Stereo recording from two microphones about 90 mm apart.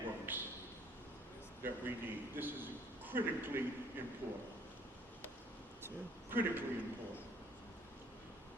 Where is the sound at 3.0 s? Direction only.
20° right (ahead or behind).